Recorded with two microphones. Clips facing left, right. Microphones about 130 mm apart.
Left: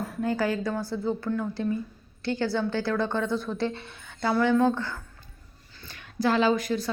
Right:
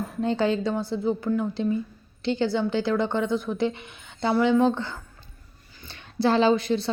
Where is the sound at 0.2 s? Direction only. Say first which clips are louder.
Right 3 dB; 25° right (ahead or behind).